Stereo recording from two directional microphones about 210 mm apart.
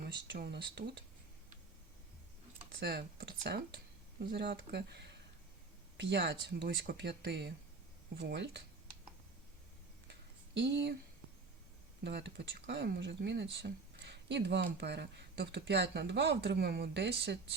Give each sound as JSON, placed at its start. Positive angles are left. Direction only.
{"t": 0.3, "sound": "speech", "side_deg": -55}
{"t": 2.8, "sound": "speech", "side_deg": -50}
{"t": 10.1, "sound": "a sound", "side_deg": -60}
{"t": 12.0, "sound": "speech", "side_deg": -55}